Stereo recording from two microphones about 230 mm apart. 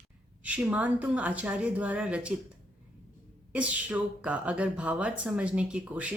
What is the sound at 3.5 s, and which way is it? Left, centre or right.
Speech, centre.